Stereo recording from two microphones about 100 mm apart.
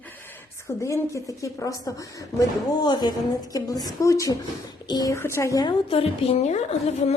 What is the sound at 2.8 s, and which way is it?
A woman's voice, 45° left (ahead or behind).